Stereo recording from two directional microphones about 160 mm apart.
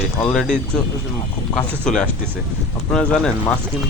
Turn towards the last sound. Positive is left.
turn(degrees=5)  # may be behind; listen again after turning